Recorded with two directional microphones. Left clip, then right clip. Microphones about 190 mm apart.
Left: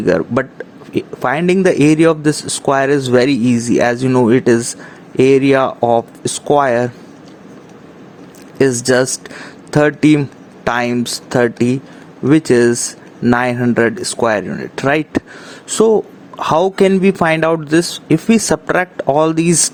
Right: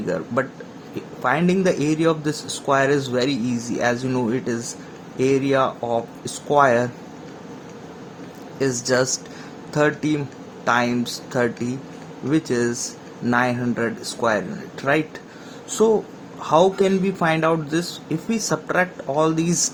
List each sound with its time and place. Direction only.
0.0 s speech: 45° left (ahead or behind)
8.5 s speech: 45° left (ahead or behind)
16.4 s speech: 50° left (ahead or behind)